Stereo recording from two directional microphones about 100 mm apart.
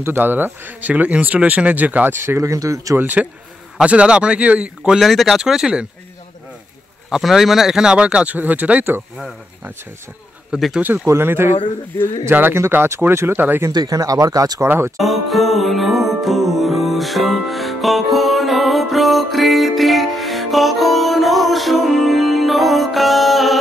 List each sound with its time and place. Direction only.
0.0 s speech: 20° right (ahead or behind)
3.0 s speech: 20° right (ahead or behind)
7.1 s speech: 5° right (ahead or behind)
10.5 s speech: 5° right (ahead or behind)
11.1 s speech: 25° right (ahead or behind)
13.7 s speech: 40° right (ahead or behind)
15.0 s music: centre (ahead or behind)